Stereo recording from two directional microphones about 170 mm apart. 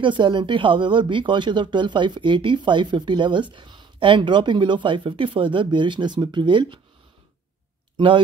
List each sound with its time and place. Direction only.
0.0 s speech: 30° right (ahead or behind)